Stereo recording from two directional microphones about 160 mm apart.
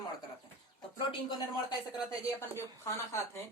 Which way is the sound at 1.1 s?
25° left (ahead or behind).